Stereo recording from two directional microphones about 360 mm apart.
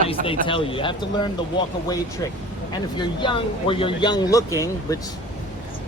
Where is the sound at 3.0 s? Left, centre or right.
Centre.